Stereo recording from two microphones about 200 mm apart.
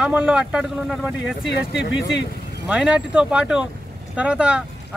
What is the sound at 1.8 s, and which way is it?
Speech, 65° left (ahead or behind).